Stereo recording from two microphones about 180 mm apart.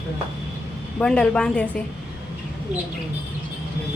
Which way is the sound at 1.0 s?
5° left (ahead or behind).